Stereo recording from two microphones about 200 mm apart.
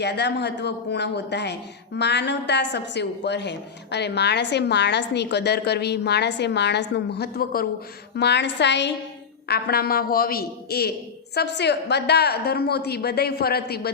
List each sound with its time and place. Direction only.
0.0 s a woman's voice: 60° left (ahead or behind)